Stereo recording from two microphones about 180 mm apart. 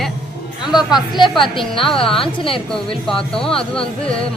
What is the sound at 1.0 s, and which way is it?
A woman's voice, 25° left (ahead or behind).